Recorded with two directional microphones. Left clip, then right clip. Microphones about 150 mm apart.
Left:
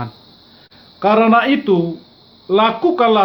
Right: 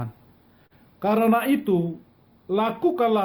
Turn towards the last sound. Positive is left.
turn(degrees=-40)  # may be behind; listen again after turning